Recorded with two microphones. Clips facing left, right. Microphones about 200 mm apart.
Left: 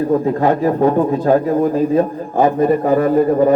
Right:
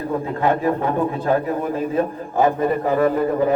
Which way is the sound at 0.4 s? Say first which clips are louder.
Left 3 dB; 40° left (ahead or behind).